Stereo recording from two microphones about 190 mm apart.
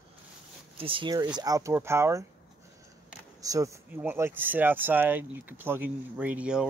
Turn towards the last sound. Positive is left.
turn(degrees=-5)  # may be behind; listen again after turning